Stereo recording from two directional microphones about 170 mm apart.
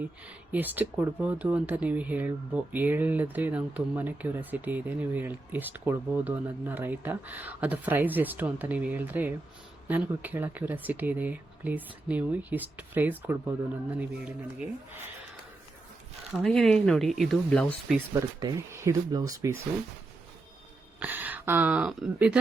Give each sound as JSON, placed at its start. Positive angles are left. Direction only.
{"t": 0.0, "sound": "speech", "side_deg": -10}
{"t": 16.4, "sound": "speech", "side_deg": 0}
{"t": 18.1, "sound": "speech", "side_deg": -20}
{"t": 21.0, "sound": "speech", "side_deg": -10}